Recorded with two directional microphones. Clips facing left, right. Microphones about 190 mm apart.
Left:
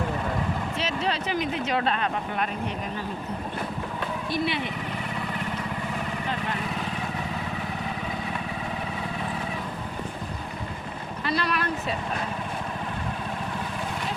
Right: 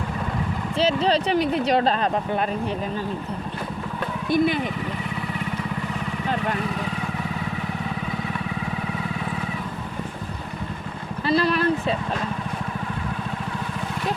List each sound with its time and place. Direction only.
0.8 s speech: 30° right (ahead or behind)
4.3 s speech: 45° right (ahead or behind)
11.3 s vehicle: 30° right (ahead or behind)